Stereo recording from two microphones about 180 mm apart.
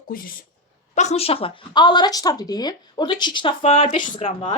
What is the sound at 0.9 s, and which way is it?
Speech, 40° left (ahead or behind).